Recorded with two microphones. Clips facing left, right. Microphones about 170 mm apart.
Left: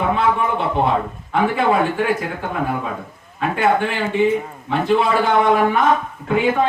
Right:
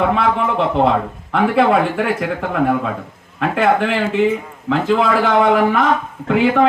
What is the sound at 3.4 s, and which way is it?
A man's voice, 85° right.